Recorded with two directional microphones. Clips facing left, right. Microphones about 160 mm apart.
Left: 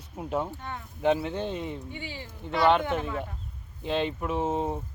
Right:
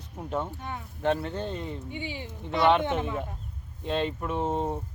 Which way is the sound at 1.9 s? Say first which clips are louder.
Right 3 dB; 15° right (ahead or behind).